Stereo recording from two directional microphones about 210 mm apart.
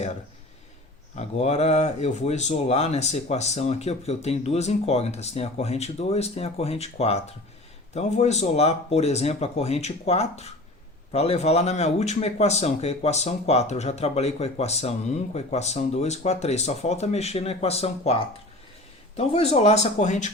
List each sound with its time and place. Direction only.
1.1 s speech: 30° left (ahead or behind)